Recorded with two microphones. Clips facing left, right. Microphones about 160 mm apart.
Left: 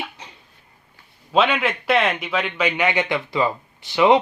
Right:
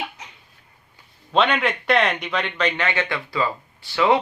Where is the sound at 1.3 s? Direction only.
5° left (ahead or behind).